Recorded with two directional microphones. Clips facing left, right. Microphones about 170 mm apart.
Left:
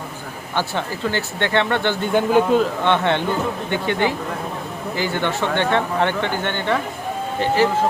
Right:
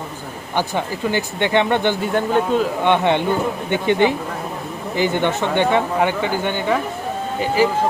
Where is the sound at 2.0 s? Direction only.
Centre (ahead or behind).